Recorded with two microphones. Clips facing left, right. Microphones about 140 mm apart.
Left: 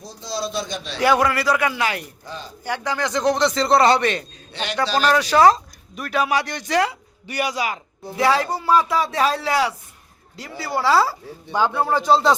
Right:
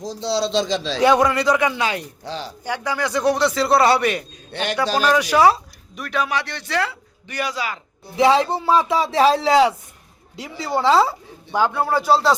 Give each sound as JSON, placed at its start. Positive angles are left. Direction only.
{"t": 0.0, "sound": "a man's voice", "side_deg": -85}
{"t": 1.5, "sound": "a man's voice", "side_deg": -15}
{"t": 2.2, "sound": "speech", "side_deg": -85}
{"t": 2.6, "sound": "a man's voice", "side_deg": -10}
{"t": 4.5, "sound": "a man's voice", "side_deg": -50}
{"t": 4.9, "sound": "a man's voice", "side_deg": -10}
{"t": 5.9, "sound": "a man's voice", "side_deg": 5}
{"t": 8.1, "sound": "speech", "side_deg": -25}
{"t": 10.6, "sound": "music", "side_deg": 5}
{"t": 10.8, "sound": "speech", "side_deg": -20}
{"t": 11.5, "sound": "a man's voice", "side_deg": -10}
{"t": 11.9, "sound": "music", "side_deg": -5}